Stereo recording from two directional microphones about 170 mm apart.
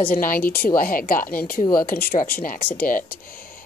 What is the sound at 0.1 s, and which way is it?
A woman's voice, 55° left (ahead or behind).